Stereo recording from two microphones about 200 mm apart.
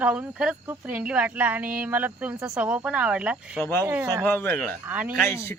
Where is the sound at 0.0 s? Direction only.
5° right (ahead or behind).